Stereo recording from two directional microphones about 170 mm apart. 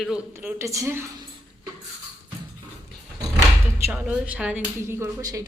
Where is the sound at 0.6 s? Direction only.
15° right (ahead or behind).